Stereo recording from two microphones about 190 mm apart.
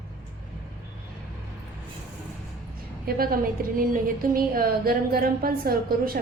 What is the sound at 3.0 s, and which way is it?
A woman's voice, 50° right (ahead or behind).